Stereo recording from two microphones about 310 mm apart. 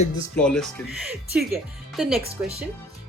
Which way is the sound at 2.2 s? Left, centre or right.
Centre.